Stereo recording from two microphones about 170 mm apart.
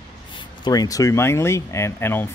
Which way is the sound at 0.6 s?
20° left (ahead or behind).